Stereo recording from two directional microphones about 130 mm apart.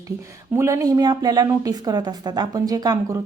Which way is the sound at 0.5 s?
20° right (ahead or behind).